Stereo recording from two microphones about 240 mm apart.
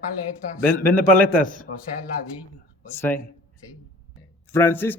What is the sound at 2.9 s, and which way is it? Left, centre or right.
Speech, centre.